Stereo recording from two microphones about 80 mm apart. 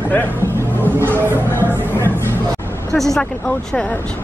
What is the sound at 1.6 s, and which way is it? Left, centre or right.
Music, left.